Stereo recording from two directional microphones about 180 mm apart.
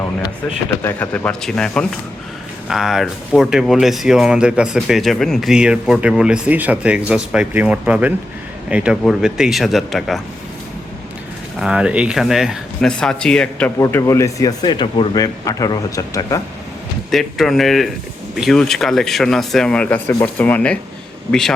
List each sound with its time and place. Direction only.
0.9 s speech: 10° left (ahead or behind)
11.6 s speech: 5° right (ahead or behind)
13.7 s speech: 15° left (ahead or behind)
17.1 s speech: centre (ahead or behind)